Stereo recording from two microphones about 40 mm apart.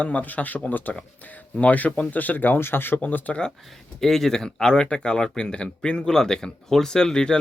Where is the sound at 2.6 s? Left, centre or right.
Left.